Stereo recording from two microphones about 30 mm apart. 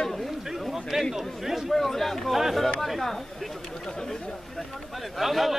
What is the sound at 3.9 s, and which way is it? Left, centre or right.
Chatter, left.